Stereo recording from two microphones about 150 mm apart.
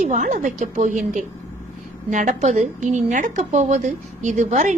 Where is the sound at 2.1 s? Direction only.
55° right (ahead or behind).